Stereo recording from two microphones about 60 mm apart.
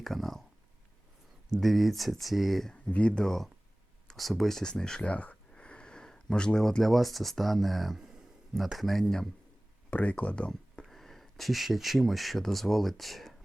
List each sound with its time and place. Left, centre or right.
0.0 s a sound: centre
1.5 s speech: centre
2.7 s speech: centre
9.9 s speech: left
10.8 s speech: centre